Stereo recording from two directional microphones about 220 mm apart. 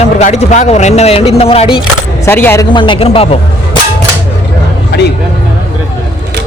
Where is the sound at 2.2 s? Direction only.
10° left (ahead or behind).